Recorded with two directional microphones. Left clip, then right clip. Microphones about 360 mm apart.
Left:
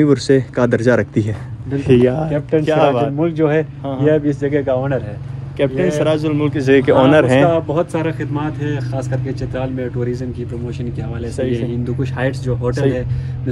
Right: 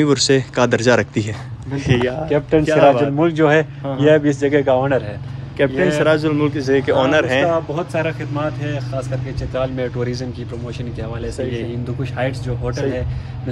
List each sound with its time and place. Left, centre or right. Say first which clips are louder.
0.0 s a man's voice: left 1 dB; centre
2.2 s a man's voice: right 1 dB; right
2.6 s a man's voice: right 1 dB; centre
3.2 s a man's voice: right 2 dB; right
5.6 s a man's voice: even; centre
6.7 s speech: left 5 dB; centre
7.7 s a man's voice: left 2 dB; centre
9.8 s speech: even; centre
11.5 s a man's voice: left 4 dB; centre